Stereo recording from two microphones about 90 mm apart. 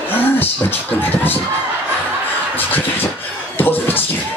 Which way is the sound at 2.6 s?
20° left (ahead or behind).